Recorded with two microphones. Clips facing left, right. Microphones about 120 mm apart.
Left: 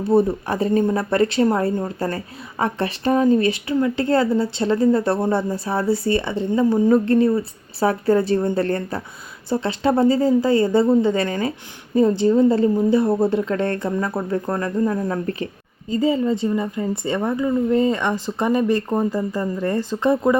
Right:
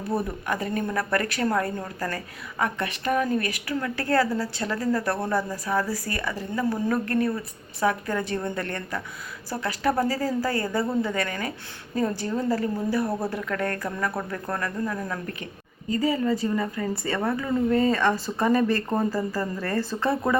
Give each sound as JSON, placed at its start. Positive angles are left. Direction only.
{"t": 0.0, "sound": "speech", "side_deg": 30}